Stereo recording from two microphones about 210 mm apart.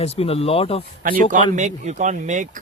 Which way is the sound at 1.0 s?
40° right (ahead or behind).